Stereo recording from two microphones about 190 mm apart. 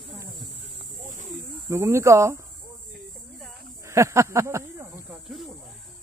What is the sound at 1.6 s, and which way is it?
Speech, 15° right (ahead or behind).